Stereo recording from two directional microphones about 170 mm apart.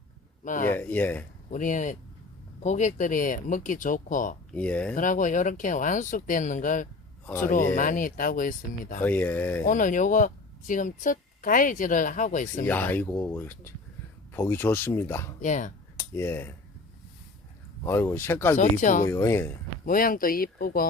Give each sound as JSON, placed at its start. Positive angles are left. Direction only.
{"t": 0.4, "sound": "speech", "side_deg": 50}
{"t": 0.8, "sound": "speech", "side_deg": 10}
{"t": 1.5, "sound": "speech", "side_deg": 50}
{"t": 4.5, "sound": "speech", "side_deg": 10}
{"t": 4.9, "sound": "speech", "side_deg": 50}
{"t": 9.0, "sound": "speech", "side_deg": 10}
{"t": 9.6, "sound": "speech", "side_deg": 50}
{"t": 12.6, "sound": "speech", "side_deg": 10}
{"t": 15.4, "sound": "speech", "side_deg": 45}
{"t": 16.0, "sound": "speech", "side_deg": 15}
{"t": 17.8, "sound": "speech", "side_deg": 15}
{"t": 18.5, "sound": "speech", "side_deg": 45}
{"t": 19.0, "sound": "speech", "side_deg": 15}
{"t": 19.8, "sound": "speech", "side_deg": 55}